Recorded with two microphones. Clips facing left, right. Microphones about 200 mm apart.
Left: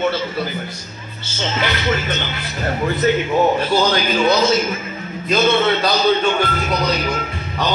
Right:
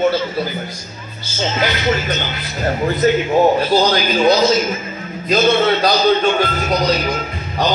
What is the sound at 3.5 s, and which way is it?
Speech, 35° right (ahead or behind).